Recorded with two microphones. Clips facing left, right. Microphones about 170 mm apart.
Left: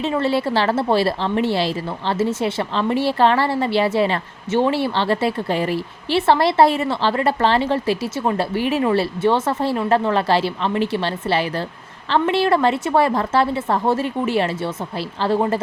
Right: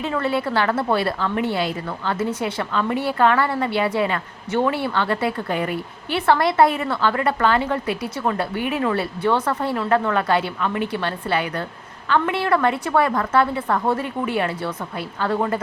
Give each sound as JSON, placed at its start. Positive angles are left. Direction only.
{"t": 0.0, "sound": "a woman's voice", "side_deg": 25}